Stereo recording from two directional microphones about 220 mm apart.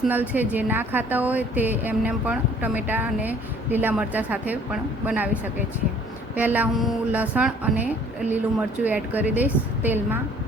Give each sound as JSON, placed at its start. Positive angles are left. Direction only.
{"t": 0.0, "sound": "speech", "side_deg": -10}